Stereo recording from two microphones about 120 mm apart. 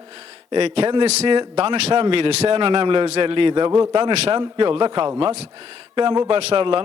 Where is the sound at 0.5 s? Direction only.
55° right (ahead or behind).